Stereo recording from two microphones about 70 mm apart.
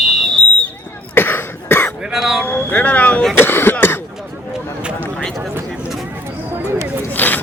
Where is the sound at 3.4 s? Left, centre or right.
Left.